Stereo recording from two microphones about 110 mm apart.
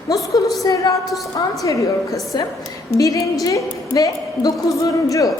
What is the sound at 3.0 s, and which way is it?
A woman's voice, 30° left (ahead or behind).